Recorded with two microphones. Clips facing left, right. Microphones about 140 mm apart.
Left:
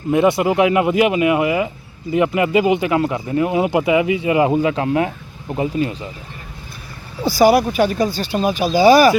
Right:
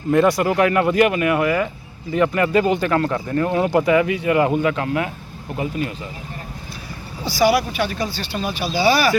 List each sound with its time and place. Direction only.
0.1 s speech: 20° left (ahead or behind)
7.3 s speech: 45° left (ahead or behind)